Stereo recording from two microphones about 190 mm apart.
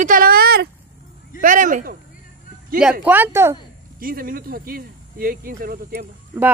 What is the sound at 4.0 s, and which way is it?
Speech, 50° right (ahead or behind).